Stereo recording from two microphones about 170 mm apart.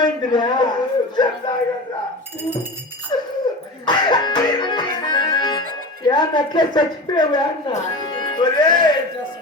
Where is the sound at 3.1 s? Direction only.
25° left (ahead or behind).